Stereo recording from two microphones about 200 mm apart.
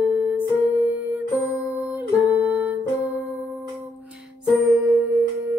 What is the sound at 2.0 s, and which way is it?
Music, 10° right (ahead or behind).